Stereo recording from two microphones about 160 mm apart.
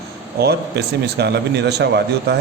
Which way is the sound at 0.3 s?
90° right.